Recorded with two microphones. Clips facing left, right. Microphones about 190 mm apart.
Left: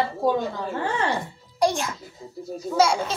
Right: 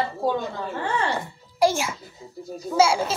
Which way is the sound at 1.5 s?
5° right (ahead or behind).